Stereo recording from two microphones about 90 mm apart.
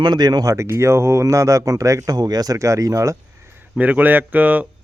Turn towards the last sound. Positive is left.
turn(degrees=-20)  # may be behind; listen again after turning